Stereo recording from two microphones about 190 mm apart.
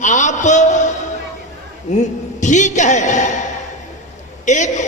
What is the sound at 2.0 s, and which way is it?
A woman's voice, 40° left (ahead or behind).